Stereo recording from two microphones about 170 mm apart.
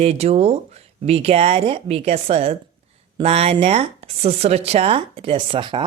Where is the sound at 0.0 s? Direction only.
40° right (ahead or behind).